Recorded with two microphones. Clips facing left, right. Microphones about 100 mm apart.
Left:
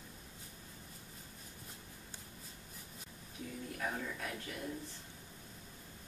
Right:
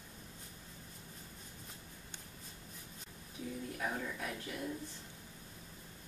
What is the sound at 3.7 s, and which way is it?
Speech, 5° right (ahead or behind).